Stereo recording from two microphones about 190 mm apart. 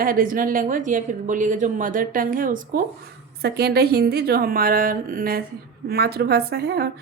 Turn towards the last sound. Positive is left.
turn(degrees=-60)  # may be behind; listen again after turning